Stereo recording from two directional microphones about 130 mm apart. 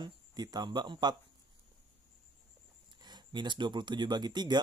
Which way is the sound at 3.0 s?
35° right (ahead or behind).